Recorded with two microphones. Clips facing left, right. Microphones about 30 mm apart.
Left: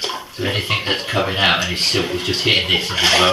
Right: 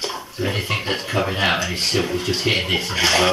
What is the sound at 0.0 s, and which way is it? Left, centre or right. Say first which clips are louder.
Speech: left 2 dB; left.